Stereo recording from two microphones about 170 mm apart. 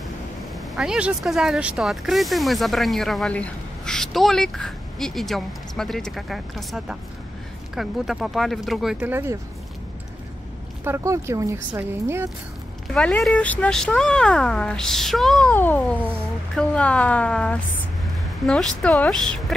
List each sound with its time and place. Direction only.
0.6 s speech: 5° right (ahead or behind)
9.1 s speech: 15° right (ahead or behind)
10.8 s speech: 15° right (ahead or behind)
12.9 s a woman's voice: 5° left (ahead or behind)